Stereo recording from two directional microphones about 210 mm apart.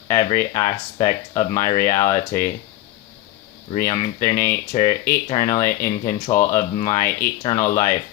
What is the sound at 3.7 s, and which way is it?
Speech, 35° left (ahead or behind).